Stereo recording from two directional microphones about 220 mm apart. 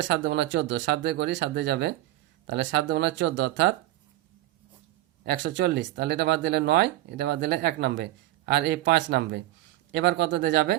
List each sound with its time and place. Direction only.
0.0 s speech: 55° right (ahead or behind)
5.2 s speech: 50° right (ahead or behind)